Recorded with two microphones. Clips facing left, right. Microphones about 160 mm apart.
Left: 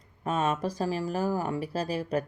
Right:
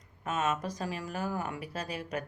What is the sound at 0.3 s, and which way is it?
Speech, 30° left (ahead or behind).